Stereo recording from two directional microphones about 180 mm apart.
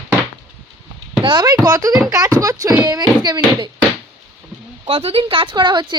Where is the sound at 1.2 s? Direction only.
25° right (ahead or behind).